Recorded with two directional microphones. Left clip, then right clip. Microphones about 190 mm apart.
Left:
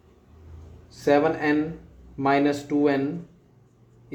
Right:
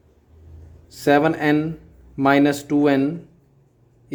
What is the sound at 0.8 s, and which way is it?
Speech, 65° right (ahead or behind).